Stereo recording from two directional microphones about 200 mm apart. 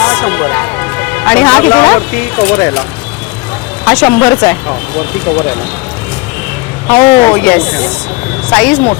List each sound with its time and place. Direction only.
0.0 s music: 5° left (ahead or behind)
1.8 s speech: 10° left (ahead or behind)
3.8 s speech: 5° left (ahead or behind)
6.9 s speech: 20° left (ahead or behind)
7.3 s speech: 5° left (ahead or behind)